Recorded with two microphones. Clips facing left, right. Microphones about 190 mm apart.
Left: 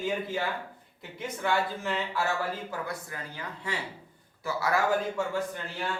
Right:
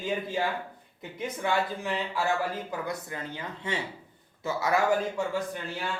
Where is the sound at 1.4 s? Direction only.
15° right (ahead or behind).